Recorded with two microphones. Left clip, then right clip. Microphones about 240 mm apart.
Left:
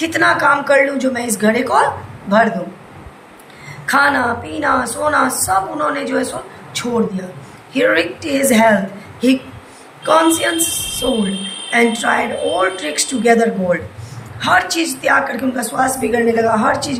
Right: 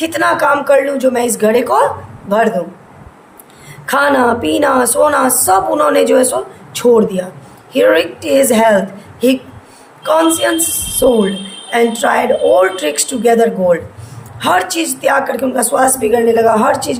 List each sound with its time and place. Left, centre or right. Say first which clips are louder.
0.0 s speech: right 1 dB; right
3.8 s speech: right 3 dB; right
10.0 s speech: right 1 dB; right